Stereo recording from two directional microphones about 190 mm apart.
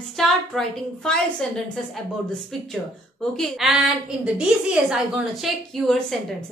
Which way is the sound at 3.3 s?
Centre (ahead or behind).